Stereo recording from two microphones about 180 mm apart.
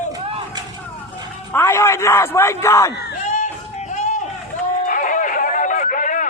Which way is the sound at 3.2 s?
45° left (ahead or behind).